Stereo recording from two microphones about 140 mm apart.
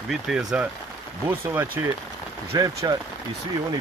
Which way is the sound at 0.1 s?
5° right (ahead or behind).